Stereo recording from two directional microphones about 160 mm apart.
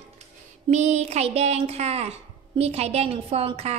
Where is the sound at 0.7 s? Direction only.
45° right (ahead or behind).